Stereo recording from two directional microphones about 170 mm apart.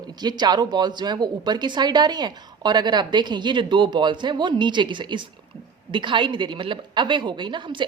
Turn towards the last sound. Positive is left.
turn(degrees=-25)  # may be behind; listen again after turning